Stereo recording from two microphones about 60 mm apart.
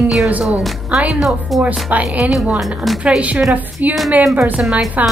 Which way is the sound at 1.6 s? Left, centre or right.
Right.